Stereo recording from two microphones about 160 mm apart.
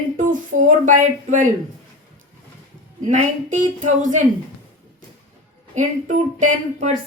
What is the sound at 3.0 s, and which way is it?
Speech, 50° right (ahead or behind).